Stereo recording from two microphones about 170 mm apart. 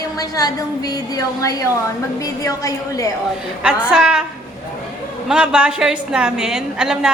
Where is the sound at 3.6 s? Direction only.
5° right (ahead or behind).